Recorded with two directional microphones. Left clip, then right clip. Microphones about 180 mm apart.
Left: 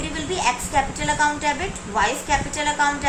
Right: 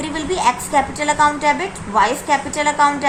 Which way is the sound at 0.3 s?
35° right (ahead or behind).